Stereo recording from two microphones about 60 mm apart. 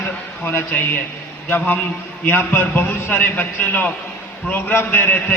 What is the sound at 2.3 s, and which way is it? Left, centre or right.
A man's voice, left.